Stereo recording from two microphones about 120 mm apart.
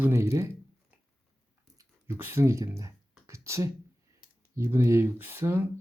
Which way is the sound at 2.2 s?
20° right (ahead or behind).